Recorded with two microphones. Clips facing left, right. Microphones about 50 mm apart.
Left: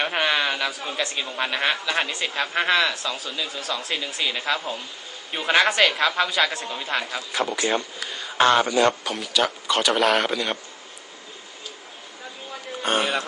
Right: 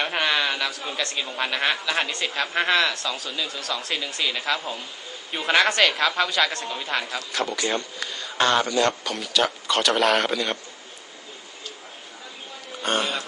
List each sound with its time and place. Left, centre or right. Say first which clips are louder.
0.0 s a man's voice: left 1 dB; centre
12.8 s a man's voice: left 1 dB; centre